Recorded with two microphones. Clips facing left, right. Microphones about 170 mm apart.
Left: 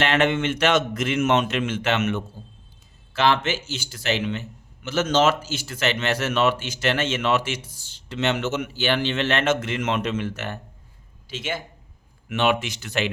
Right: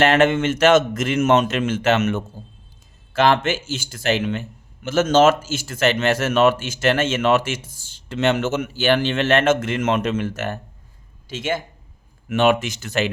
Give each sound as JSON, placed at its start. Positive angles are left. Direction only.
{"t": 0.0, "sound": "a man's voice", "side_deg": -45}